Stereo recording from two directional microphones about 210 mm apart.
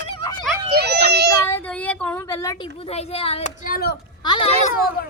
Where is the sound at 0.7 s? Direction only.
50° right (ahead or behind).